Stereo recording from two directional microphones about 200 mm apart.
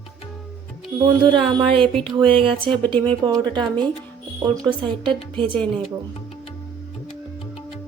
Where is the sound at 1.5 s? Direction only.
25° right (ahead or behind).